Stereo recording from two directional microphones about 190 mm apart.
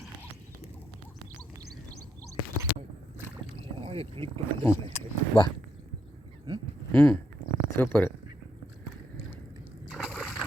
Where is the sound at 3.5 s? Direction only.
30° right (ahead or behind).